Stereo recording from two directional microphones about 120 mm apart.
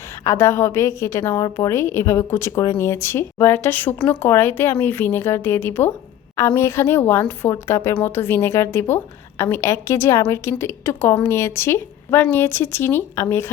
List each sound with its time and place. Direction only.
0.3 s speech: 25° left (ahead or behind)